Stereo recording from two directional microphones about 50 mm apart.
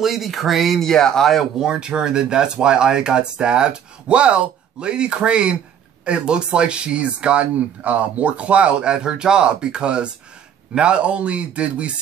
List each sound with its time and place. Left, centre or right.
0.0 s speech: centre
1.6 s speech: centre